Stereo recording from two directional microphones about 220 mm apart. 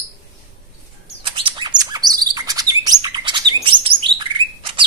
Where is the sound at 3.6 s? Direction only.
20° right (ahead or behind).